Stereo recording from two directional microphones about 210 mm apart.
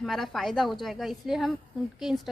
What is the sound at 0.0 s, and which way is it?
A woman's voice, centre (ahead or behind).